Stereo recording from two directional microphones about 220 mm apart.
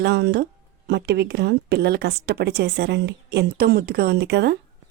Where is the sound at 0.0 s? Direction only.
50° right (ahead or behind).